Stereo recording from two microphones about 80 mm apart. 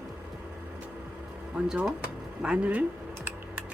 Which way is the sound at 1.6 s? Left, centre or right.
Centre.